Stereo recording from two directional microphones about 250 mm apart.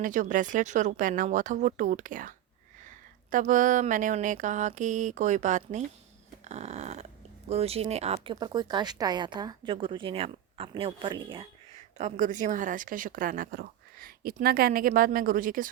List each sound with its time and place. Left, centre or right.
0.0 s speech: right